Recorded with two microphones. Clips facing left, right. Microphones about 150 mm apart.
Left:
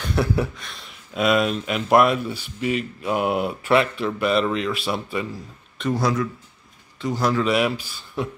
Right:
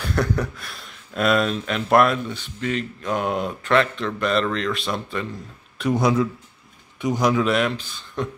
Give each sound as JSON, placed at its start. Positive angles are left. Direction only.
{"t": 0.0, "sound": "a sound", "side_deg": 5}
{"t": 0.7, "sound": "speech", "side_deg": 0}
{"t": 5.9, "sound": "a man's voice", "side_deg": -20}
{"t": 7.4, "sound": "speech", "side_deg": 5}